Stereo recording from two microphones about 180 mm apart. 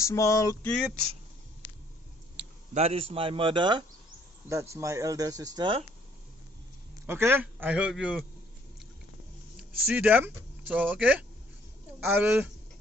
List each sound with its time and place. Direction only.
0.0 s a sound: 15° left (ahead or behind)
2.7 s speech: 35° right (ahead or behind)
4.5 s speech: 15° right (ahead or behind)
7.1 s a man's voice: 10° right (ahead or behind)
9.6 s a man's voice: 10° right (ahead or behind)